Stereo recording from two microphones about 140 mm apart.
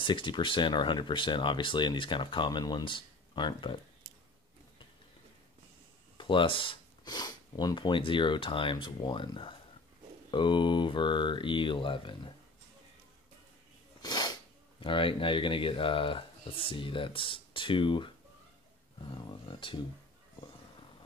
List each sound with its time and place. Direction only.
0.0 s speech: 35° left (ahead or behind)
6.1 s speech: 35° left (ahead or behind)
14.0 s sneeze: 30° left (ahead or behind)
14.8 s speech: 35° left (ahead or behind)
19.4 s speech: 35° left (ahead or behind)